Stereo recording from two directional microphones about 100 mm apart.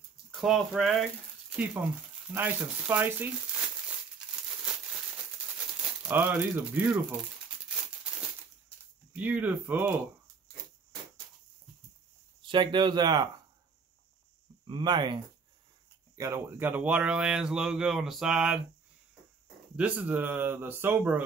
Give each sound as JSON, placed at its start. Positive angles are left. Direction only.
{"t": 0.4, "sound": "speech", "side_deg": 0}
{"t": 2.3, "sound": "speech", "side_deg": -15}
{"t": 5.8, "sound": "crumpling", "side_deg": -10}
{"t": 6.1, "sound": "speech", "side_deg": -15}
{"t": 7.6, "sound": "a sound", "side_deg": -10}
{"t": 12.4, "sound": "speech", "side_deg": -55}
{"t": 14.6, "sound": "speech", "side_deg": -50}
{"t": 16.2, "sound": "speech", "side_deg": -30}
{"t": 19.7, "sound": "speech", "side_deg": -15}